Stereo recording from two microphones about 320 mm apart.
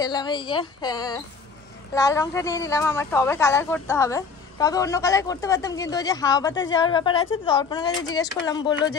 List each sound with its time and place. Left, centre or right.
0.0 s a woman's voice: centre